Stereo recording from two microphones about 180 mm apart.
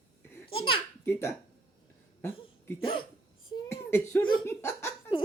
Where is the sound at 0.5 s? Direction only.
30° left (ahead or behind).